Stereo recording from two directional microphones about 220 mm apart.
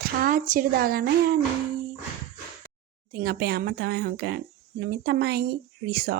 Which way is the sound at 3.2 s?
45° right (ahead or behind).